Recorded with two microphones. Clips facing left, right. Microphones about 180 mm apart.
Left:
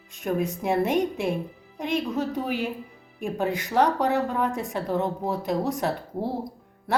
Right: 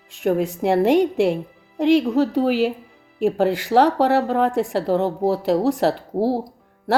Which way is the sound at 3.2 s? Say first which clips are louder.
Right 8 dB; 75° right (ahead or behind).